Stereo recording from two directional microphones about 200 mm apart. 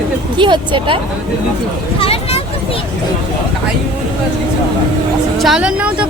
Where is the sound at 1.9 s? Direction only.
30° left (ahead or behind).